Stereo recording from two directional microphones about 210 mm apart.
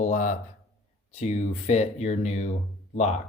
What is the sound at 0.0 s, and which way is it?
Speech, 35° left (ahead or behind).